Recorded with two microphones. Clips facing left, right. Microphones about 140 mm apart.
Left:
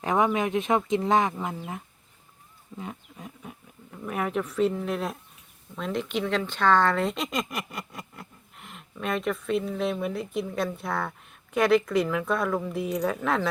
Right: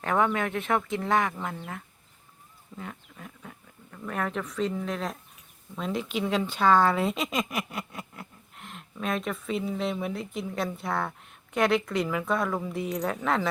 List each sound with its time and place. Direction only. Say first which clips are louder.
0.0 s speech: left 2 dB; 15° left (ahead or behind)
2.7 s speech: left 2 dB; 20° left (ahead or behind); by 13.5 s centre (ahead or behind)